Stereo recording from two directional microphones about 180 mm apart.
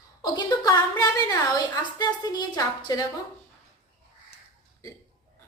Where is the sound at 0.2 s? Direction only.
20° left (ahead or behind).